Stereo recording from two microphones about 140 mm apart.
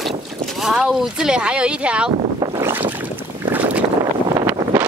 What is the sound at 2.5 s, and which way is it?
Boat, 20° right (ahead or behind).